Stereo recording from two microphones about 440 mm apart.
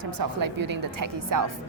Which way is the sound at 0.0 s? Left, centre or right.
Right.